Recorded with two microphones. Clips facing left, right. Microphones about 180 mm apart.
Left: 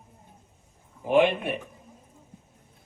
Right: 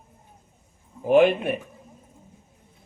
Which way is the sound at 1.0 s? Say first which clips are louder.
Right 4 dB; 45° right (ahead or behind).